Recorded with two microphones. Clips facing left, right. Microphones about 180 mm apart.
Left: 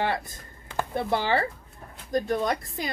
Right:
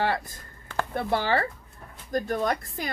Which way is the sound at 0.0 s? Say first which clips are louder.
Right 1 dB; 20° left (ahead or behind).